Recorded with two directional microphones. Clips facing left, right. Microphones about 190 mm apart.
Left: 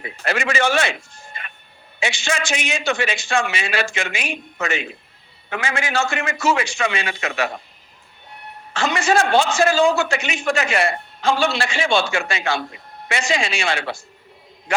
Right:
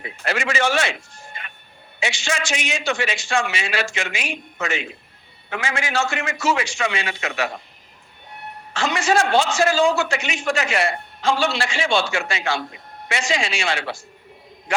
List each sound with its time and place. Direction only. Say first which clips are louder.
0.3 s a man's voice: left 1 dB; 55° left (ahead or behind)
2.0 s a man's voice: left 2 dB; 55° left (ahead or behind)
8.7 s a man's voice: left 1 dB; 55° left (ahead or behind)